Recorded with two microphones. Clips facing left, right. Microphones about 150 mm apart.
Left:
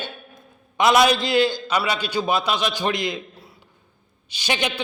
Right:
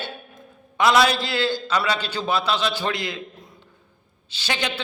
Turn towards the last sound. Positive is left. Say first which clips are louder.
# left 3 dB
turn(degrees=15)  # may be behind; listen again after turning